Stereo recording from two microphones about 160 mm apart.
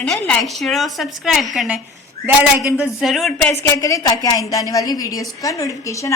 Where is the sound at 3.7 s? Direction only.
20° left (ahead or behind).